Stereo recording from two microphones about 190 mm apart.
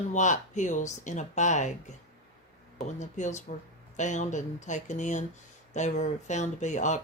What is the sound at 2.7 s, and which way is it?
Speech, 40° left (ahead or behind).